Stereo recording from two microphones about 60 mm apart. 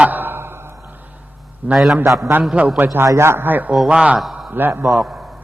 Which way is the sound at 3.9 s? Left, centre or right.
Centre.